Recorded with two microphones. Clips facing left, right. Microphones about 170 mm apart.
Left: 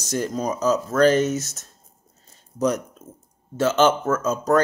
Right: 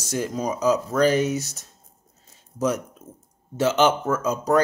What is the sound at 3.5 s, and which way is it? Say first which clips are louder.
Speech: left 1 dB; 15° right (ahead or behind).